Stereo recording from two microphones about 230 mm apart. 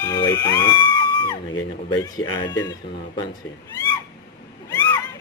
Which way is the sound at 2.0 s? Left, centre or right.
Centre.